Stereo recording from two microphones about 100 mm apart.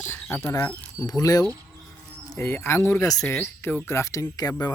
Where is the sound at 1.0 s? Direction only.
35° left (ahead or behind).